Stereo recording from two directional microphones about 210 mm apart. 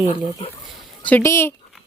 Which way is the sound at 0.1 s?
25° left (ahead or behind).